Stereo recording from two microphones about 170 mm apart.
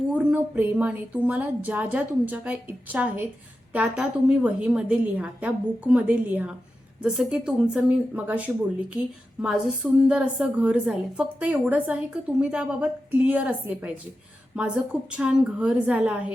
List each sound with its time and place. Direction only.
0.1 s a woman's voice: 10° right (ahead or behind)